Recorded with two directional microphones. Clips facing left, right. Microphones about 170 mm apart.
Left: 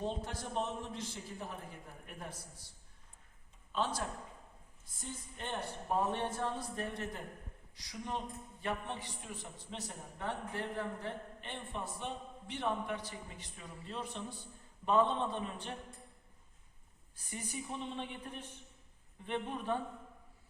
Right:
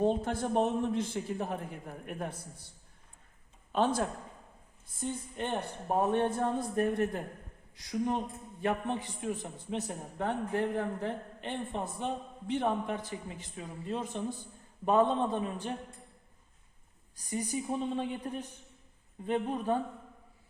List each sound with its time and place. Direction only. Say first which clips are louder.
0.0 s a man's voice: right 10 dB; 55° right (ahead or behind)
3.7 s speech: right 8 dB; 55° right (ahead or behind)
5.0 s a man's voice: right 9 dB; 60° right (ahead or behind); by 15.7 s 45° right (ahead or behind)
17.2 s a woman's voice: right 9 dB; 40° right (ahead or behind)